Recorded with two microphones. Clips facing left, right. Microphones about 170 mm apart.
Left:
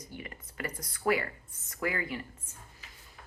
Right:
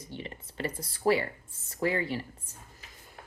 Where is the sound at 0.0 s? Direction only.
25° right (ahead or behind).